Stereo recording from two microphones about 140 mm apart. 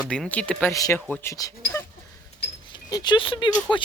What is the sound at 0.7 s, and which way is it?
Speech, 25° left (ahead or behind).